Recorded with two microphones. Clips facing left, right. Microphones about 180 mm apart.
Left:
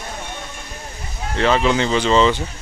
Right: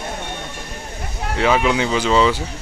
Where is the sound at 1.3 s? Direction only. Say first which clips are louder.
Even; 10° right (ahead or behind).